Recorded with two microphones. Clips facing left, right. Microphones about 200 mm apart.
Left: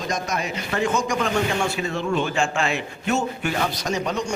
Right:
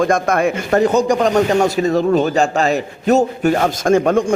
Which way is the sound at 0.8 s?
35° right (ahead or behind).